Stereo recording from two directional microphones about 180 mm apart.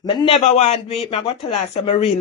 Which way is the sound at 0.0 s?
25° left (ahead or behind).